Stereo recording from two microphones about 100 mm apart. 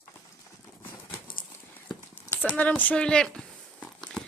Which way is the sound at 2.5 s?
15° left (ahead or behind).